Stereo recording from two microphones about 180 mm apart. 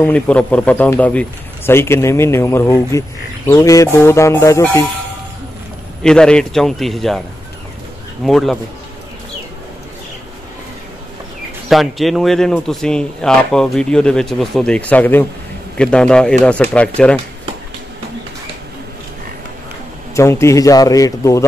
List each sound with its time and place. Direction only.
0.0 s speech: 5° left (ahead or behind)
6.0 s speech: 5° left (ahead or behind)
8.3 s speech: centre (ahead or behind)
11.7 s speech: centre (ahead or behind)
20.2 s speech: 15° left (ahead or behind)